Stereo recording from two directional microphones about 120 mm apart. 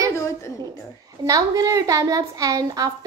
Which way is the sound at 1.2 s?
30° right (ahead or behind).